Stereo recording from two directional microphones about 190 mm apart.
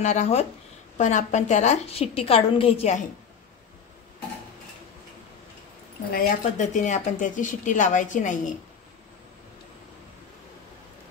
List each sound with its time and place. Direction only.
0.0 s speech: 35° left (ahead or behind)
6.1 s speech: 40° left (ahead or behind)